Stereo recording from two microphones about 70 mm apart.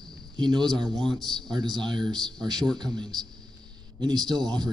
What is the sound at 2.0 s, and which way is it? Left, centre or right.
Speech, right.